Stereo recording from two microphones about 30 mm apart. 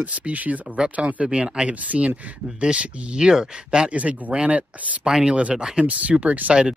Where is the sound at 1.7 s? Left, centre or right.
Right.